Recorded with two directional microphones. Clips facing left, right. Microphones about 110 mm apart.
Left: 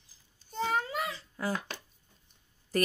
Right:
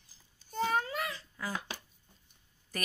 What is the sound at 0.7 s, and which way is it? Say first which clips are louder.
Babbling: left 1 dB; 20° left (ahead or behind).